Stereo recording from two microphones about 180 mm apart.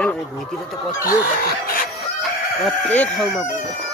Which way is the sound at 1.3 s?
50° left (ahead or behind).